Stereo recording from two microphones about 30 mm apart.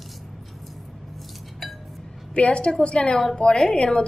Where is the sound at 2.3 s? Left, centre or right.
Left.